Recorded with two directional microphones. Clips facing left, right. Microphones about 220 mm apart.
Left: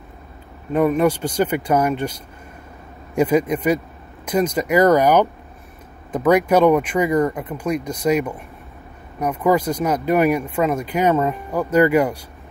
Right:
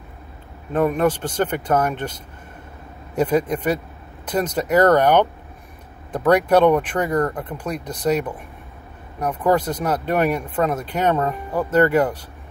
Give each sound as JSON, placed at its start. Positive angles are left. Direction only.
{"t": 0.7, "sound": "speech", "side_deg": 10}
{"t": 3.2, "sound": "speech", "side_deg": 10}